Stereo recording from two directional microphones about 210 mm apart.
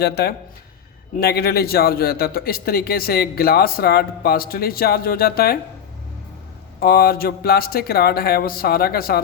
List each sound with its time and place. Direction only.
0.0 s a man's voice: 50° left (ahead or behind)
6.7 s a man's voice: 45° left (ahead or behind)